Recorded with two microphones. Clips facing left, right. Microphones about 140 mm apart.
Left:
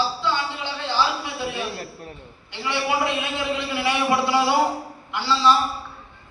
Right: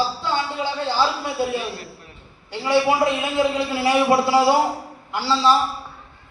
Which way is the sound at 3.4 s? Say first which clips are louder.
Right 8 dB; 40° right (ahead or behind).